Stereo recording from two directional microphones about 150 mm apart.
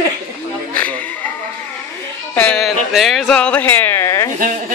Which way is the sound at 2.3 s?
5° left (ahead or behind).